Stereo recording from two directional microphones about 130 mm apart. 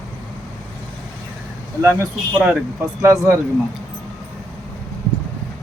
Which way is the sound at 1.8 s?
20° right (ahead or behind).